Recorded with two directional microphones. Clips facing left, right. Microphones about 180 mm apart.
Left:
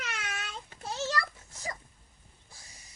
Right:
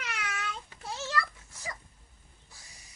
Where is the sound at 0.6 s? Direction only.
40° left (ahead or behind).